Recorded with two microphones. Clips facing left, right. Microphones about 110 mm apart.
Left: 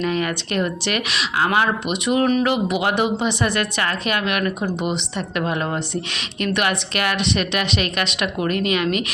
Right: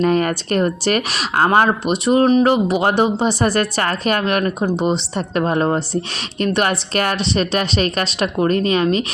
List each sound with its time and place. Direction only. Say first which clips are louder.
0.0 s a woman's voice: right 6 dB; 45° right (ahead or behind)